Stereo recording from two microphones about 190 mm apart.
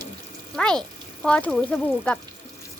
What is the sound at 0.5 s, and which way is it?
Speech, 5° left (ahead or behind).